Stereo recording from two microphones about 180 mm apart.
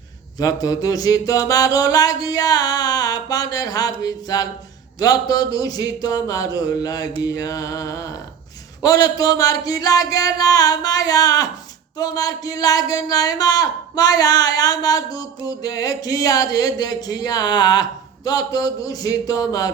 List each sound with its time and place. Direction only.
0.3 s speech: 20° left (ahead or behind)